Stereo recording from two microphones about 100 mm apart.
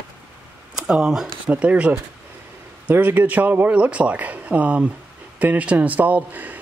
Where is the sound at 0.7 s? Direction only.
10° right (ahead or behind).